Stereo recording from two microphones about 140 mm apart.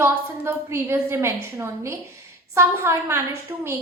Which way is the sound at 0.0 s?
15° right (ahead or behind).